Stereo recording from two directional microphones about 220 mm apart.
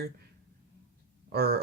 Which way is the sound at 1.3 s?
45° right (ahead or behind).